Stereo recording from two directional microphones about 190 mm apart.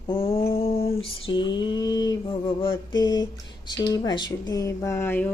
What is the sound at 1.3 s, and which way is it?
Mantra, 25° left (ahead or behind).